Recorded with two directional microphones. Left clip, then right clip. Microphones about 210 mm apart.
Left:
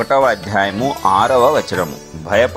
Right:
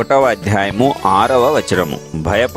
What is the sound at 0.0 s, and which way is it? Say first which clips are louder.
Speech: right 1 dB; 45° right (ahead or behind).